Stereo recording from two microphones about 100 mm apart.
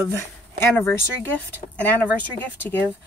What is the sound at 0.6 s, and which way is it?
Speech, 25° left (ahead or behind).